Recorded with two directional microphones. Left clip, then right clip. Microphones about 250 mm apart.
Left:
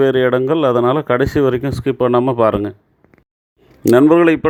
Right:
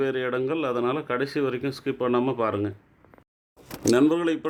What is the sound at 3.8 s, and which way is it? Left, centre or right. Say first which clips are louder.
Speech: left 11 dB; left.